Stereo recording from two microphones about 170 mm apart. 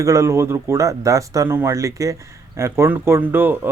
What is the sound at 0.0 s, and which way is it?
Speech, 20° right (ahead or behind).